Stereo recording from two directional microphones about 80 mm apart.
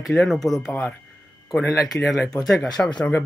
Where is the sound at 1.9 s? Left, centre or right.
Centre.